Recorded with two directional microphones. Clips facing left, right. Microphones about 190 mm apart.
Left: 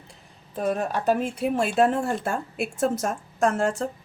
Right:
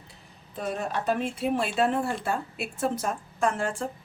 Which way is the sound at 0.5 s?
50° left (ahead or behind).